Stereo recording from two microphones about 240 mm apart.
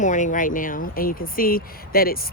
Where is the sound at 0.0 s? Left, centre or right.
Left.